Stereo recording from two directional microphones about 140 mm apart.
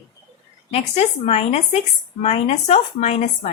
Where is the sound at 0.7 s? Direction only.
45° left (ahead or behind).